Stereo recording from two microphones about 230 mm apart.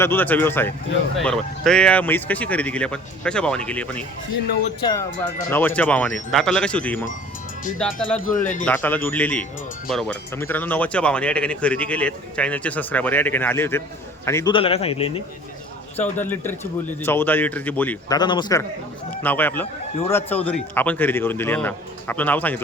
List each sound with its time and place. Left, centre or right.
0.0 s speech: centre
5.5 s speech: centre
8.3 s a man's voice: left
8.6 s speech: centre
14.5 s speech: left
16.0 s speech: centre
18.2 s speech: centre
19.2 s speech: centre